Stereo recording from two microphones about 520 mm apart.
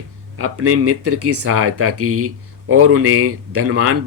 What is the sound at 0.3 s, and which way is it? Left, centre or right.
Speech, right.